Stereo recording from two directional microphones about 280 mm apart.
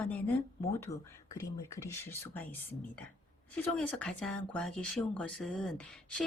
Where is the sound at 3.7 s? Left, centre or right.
Centre.